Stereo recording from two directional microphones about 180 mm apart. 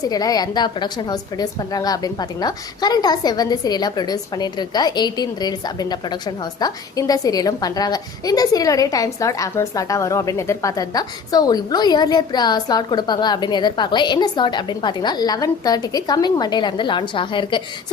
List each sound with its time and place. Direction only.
0.0 s a woman's voice: 20° left (ahead or behind)